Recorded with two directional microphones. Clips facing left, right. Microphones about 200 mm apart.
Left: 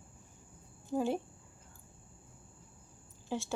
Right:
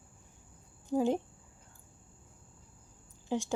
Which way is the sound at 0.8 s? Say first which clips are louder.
Right 3 dB; 15° right (ahead or behind).